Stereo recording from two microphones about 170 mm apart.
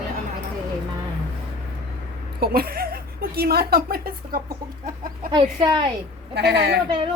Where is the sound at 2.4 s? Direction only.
60° right (ahead or behind).